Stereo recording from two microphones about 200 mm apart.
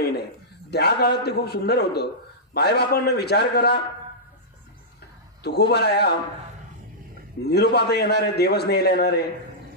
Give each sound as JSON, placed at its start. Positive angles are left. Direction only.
{"t": 0.7, "sound": "a man's voice", "side_deg": 55}
{"t": 5.4, "sound": "a man's voice", "side_deg": 55}
{"t": 7.4, "sound": "a man's voice", "side_deg": 55}